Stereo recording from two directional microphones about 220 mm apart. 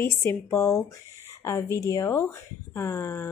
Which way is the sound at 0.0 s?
10° left (ahead or behind).